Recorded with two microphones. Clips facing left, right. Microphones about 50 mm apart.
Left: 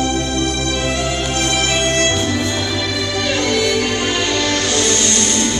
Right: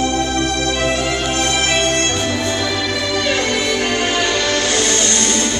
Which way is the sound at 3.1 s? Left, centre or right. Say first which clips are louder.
Even; right.